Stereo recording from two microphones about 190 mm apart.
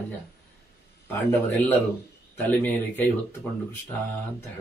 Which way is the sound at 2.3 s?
10° left (ahead or behind).